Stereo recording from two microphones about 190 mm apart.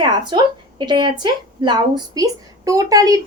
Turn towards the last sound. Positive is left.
turn(degrees=-20)  # may be behind; listen again after turning